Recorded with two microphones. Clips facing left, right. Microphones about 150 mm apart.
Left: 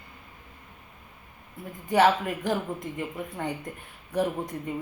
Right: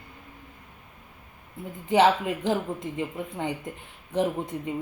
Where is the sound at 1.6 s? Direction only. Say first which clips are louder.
Right 1 dB; 20° right (ahead or behind).